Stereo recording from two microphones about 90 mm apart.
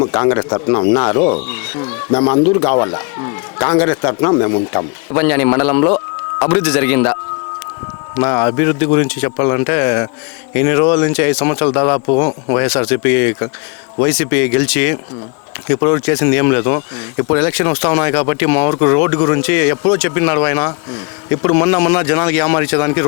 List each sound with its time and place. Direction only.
0.0 s speech: 25° left (ahead or behind)